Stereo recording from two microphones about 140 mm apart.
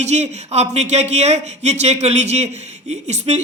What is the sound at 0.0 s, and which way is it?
Speech, 55° right (ahead or behind).